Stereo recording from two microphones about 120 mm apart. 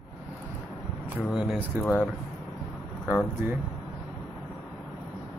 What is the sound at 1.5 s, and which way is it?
Speech, 10° left (ahead or behind).